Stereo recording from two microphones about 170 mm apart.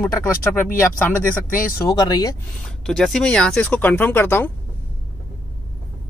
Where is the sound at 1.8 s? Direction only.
20° left (ahead or behind).